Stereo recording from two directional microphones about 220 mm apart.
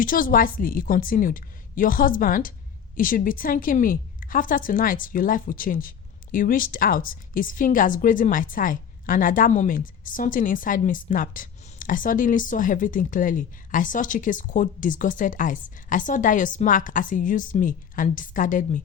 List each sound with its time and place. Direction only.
0.0 s a woman's voice: 40° left (ahead or behind)